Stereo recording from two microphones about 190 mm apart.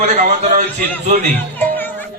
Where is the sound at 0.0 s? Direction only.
35° right (ahead or behind).